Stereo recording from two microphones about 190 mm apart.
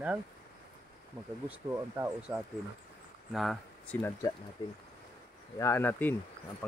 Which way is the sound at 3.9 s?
15° left (ahead or behind).